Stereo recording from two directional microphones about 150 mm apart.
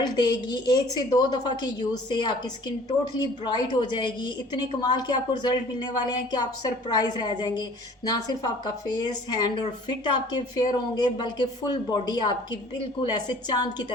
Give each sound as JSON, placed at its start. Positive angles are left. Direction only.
{"t": 0.0, "sound": "a woman's voice", "side_deg": 30}